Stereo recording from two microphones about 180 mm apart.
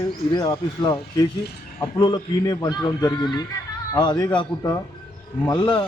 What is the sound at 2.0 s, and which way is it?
Speech, 25° left (ahead or behind).